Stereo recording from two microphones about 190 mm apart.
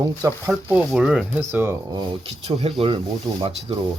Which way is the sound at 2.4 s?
35° right (ahead or behind).